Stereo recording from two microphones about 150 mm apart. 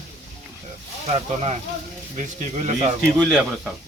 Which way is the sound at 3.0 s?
5° right (ahead or behind).